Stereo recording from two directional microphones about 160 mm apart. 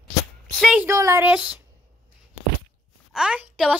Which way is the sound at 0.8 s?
20° right (ahead or behind).